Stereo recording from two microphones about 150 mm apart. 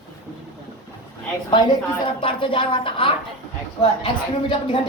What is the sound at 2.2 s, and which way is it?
A woman's voice, 35° left (ahead or behind).